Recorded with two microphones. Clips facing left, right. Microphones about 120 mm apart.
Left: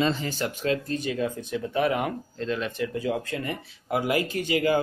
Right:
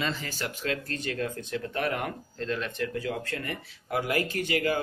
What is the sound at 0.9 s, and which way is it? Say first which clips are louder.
Speech: left 4 dB; 15° left (ahead or behind).